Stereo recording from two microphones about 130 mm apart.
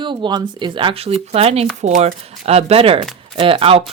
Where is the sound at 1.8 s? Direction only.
65° right (ahead or behind).